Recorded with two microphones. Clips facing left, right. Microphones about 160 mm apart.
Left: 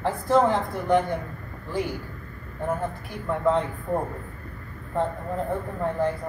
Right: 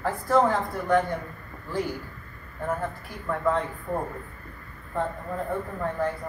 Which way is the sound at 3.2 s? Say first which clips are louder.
Left 3 dB; 20° left (ahead or behind).